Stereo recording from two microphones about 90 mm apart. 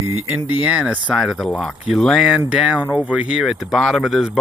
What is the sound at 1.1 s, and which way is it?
Speech, centre (ahead or behind).